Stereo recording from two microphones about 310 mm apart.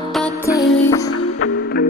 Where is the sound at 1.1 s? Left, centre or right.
Left.